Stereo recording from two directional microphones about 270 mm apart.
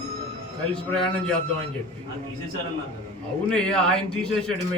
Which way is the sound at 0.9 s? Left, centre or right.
Centre.